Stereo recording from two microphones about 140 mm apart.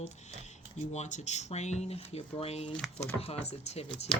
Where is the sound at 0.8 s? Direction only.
60° left (ahead or behind).